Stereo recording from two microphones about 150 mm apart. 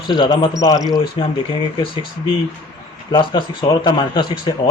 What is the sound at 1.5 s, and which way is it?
A man's voice, 35° left (ahead or behind).